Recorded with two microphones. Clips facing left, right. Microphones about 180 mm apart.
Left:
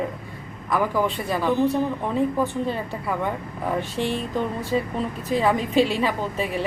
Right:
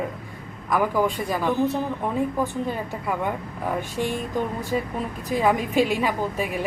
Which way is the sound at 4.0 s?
15° right (ahead or behind).